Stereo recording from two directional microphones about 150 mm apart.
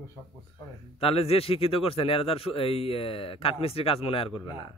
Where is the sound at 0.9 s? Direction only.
40° left (ahead or behind).